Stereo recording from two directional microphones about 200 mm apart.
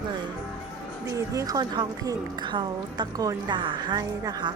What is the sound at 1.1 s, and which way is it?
A woman's voice, 15° right (ahead or behind).